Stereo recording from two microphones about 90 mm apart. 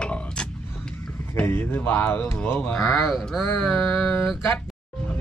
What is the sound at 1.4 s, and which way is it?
Speech, 25° left (ahead or behind).